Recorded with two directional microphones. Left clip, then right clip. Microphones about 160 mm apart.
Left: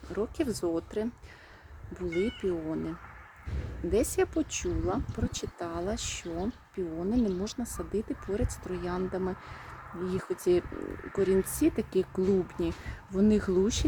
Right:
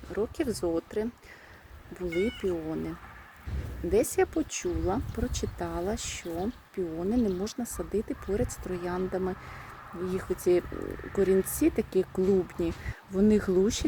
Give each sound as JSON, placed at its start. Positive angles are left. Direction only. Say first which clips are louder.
{"t": 0.1, "sound": "speech", "louder": "right 1 dB", "side_deg": -5}
{"t": 2.0, "sound": "speech", "louder": "right 1 dB", "side_deg": -75}
{"t": 2.4, "sound": "speech", "louder": "right 1 dB", "side_deg": -5}
{"t": 3.9, "sound": "speech", "louder": "right 2 dB", "side_deg": -5}